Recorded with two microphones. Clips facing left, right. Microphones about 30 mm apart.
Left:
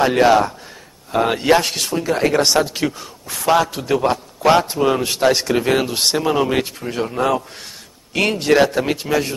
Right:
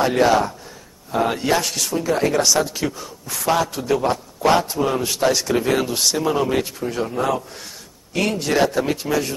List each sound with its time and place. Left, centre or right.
0.0 s a man's voice: left
2.4 s a man's voice: left
3.3 s a man's voice: centre
3.6 s a man's voice: left
8.1 s a man's voice: left